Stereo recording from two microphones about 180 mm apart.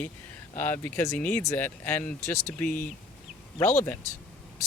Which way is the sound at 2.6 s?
50° left (ahead or behind).